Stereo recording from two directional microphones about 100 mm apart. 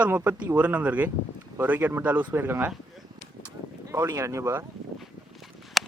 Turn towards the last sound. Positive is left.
turn(degrees=0)  # may be behind; listen again after turning